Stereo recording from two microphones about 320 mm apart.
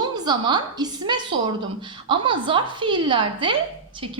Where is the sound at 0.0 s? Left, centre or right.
Centre.